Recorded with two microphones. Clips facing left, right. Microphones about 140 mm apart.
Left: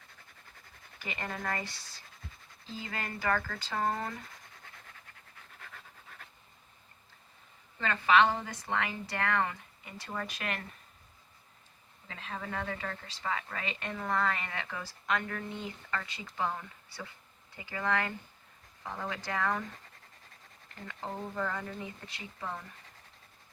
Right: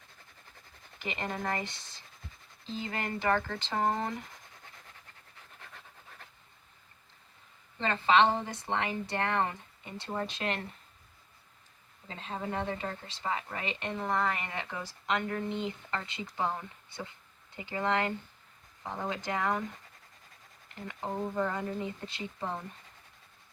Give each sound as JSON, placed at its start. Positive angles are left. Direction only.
{"t": 0.9, "sound": "speech", "side_deg": -20}
{"t": 7.8, "sound": "speech", "side_deg": -25}
{"t": 12.0, "sound": "speech", "side_deg": -25}